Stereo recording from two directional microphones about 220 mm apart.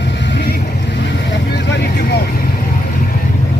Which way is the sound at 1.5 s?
50° left (ahead or behind).